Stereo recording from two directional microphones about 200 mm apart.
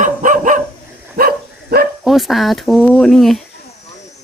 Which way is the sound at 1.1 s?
50° right (ahead or behind).